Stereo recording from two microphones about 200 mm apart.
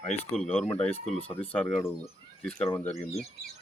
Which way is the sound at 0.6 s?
30° left (ahead or behind).